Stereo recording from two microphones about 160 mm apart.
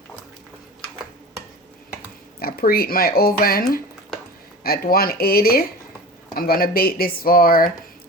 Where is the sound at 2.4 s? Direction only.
70° left (ahead or behind).